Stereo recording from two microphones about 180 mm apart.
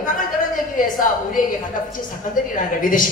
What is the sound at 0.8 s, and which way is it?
Speech, 50° left (ahead or behind).